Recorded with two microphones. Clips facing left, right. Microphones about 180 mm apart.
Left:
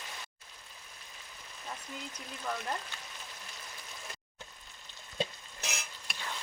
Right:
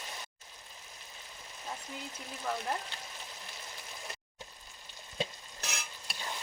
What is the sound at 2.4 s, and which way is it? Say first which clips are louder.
Speech: right 2 dB; 10° right (ahead or behind).